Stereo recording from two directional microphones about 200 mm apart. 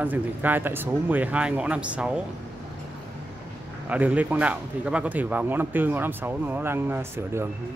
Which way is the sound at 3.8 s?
5° right (ahead or behind).